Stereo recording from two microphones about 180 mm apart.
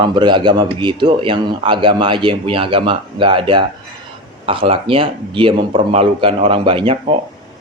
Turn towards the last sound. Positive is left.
turn(degrees=-30)  # may be behind; listen again after turning